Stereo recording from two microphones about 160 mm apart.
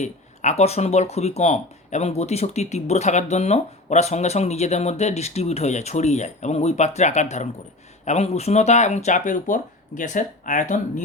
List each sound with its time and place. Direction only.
0.0 s speech: 45° left (ahead or behind)